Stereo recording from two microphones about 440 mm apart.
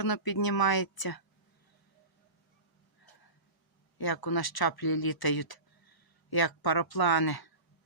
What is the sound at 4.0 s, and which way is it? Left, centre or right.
Speech, left.